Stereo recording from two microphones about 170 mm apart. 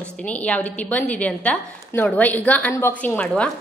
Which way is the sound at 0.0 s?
5° left (ahead or behind).